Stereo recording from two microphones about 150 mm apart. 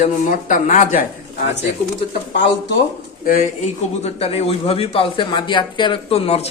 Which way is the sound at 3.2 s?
65° left (ahead or behind).